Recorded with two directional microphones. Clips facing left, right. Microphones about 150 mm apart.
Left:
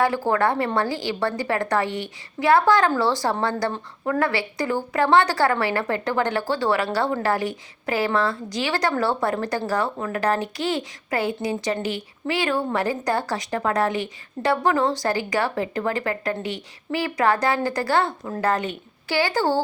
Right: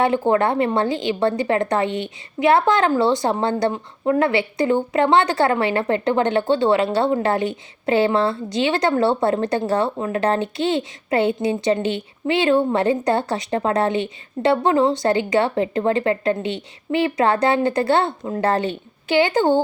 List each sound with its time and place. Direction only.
0.0 s speech: 20° right (ahead or behind)